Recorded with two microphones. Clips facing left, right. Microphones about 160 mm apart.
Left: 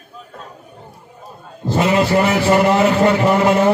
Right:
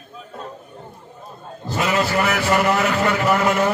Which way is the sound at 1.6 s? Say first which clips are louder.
Left 5 dB; 30° left (ahead or behind).